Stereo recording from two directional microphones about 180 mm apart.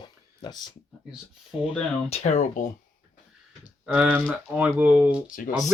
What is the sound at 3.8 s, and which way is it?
Speech, 5° right (ahead or behind).